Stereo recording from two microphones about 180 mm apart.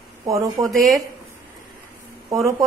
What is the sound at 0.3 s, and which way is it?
Speech, 20° right (ahead or behind).